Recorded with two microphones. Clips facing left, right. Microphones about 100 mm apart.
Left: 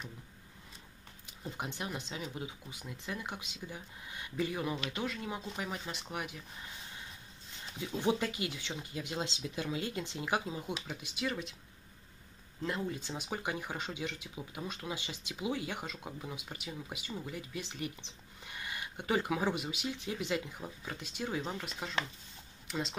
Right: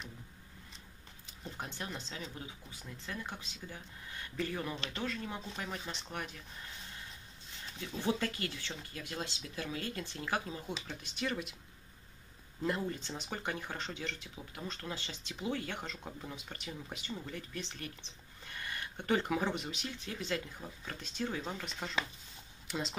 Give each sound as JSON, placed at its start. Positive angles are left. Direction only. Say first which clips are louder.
{"t": 1.2, "sound": "speech", "louder": "left 3 dB", "side_deg": 15}
{"t": 7.8, "sound": "speech", "louder": "left 3 dB", "side_deg": 15}
{"t": 11.2, "sound": "speech", "louder": "even", "side_deg": 0}
{"t": 12.6, "sound": "speech", "louder": "right 1 dB", "side_deg": 0}